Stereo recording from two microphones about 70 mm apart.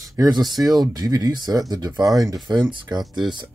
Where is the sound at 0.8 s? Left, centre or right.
Right.